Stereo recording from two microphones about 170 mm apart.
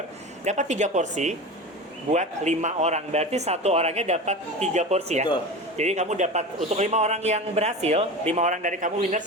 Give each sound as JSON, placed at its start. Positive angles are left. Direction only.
{"t": 0.4, "sound": "a man's voice", "side_deg": -45}